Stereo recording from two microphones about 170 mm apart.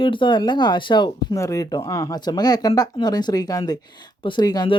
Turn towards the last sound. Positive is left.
turn(degrees=25)  # may be behind; listen again after turning